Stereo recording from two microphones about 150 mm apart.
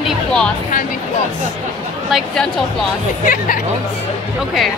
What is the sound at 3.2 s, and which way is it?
Speech, 65° left (ahead or behind).